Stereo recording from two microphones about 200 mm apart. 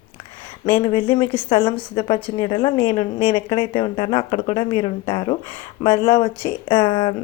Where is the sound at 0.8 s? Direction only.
25° left (ahead or behind).